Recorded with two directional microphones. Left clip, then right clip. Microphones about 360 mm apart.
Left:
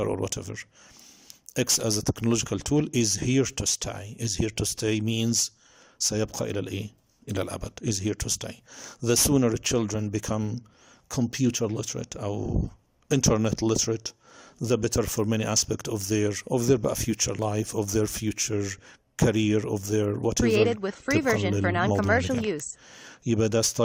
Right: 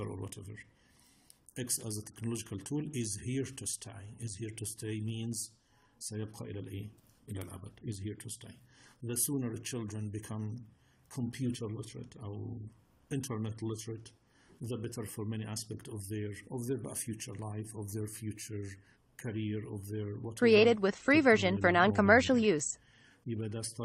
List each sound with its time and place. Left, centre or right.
0.0 s speech: left
20.4 s speech: centre
23.0 s speech: left